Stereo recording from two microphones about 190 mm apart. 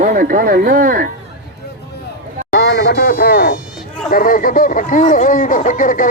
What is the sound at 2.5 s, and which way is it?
Speech, 60° left (ahead or behind).